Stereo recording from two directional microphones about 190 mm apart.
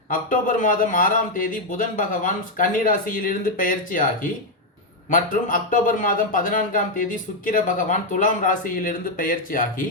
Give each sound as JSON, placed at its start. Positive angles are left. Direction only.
{"t": 0.1, "sound": "a man's voice", "side_deg": 45}